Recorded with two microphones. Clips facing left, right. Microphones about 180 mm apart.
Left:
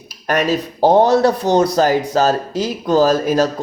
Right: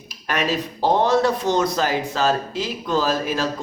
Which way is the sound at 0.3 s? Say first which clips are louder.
Left 6 dB; 40° left (ahead or behind).